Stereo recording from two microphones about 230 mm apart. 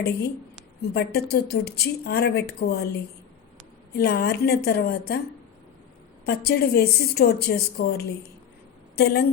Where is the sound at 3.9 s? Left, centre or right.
Left.